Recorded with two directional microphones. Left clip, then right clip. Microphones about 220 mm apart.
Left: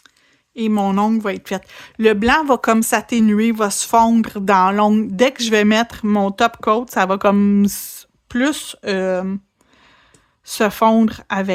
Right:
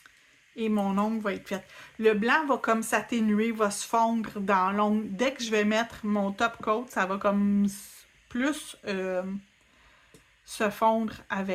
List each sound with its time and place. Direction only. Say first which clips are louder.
0.5 s speech: left 10 dB; 50° left (ahead or behind)
10.4 s speech: left 10 dB; 45° left (ahead or behind)